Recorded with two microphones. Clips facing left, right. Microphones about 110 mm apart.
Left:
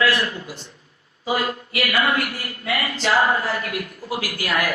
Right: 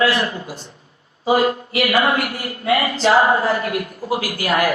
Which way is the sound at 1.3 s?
30° right (ahead or behind).